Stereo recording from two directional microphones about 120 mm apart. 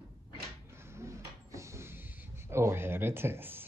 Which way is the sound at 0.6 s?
20° right (ahead or behind).